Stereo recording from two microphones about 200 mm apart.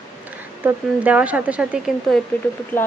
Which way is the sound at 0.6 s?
5° right (ahead or behind).